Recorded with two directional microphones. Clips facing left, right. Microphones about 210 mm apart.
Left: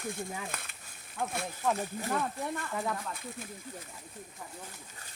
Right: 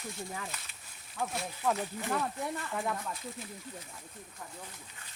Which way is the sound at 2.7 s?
Centre (ahead or behind).